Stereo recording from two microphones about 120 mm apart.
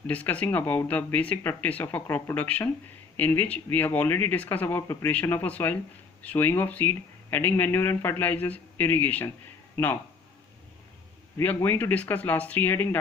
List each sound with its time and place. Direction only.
0.1 s speech: 10° left (ahead or behind)
11.3 s speech: 20° left (ahead or behind)